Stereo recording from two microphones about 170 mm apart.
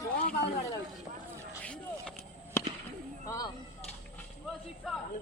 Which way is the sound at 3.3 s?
20° left (ahead or behind).